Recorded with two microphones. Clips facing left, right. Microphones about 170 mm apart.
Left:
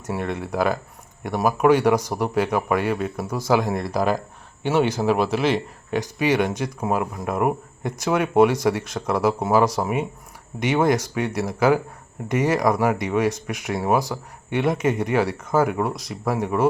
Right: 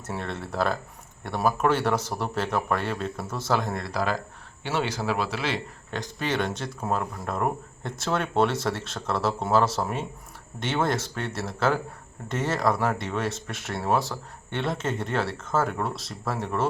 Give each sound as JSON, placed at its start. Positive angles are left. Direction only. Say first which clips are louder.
{"t": 0.1, "sound": "speech", "louder": "left 6 dB", "side_deg": 10}